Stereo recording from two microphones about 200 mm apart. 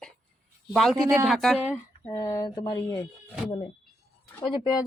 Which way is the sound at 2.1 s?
20° left (ahead or behind).